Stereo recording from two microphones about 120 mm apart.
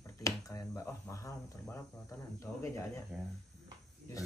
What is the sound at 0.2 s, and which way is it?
Speech, 25° left (ahead or behind).